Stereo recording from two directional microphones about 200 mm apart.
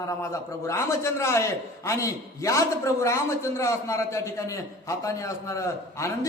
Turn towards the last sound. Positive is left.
turn(degrees=15)  # may be behind; listen again after turning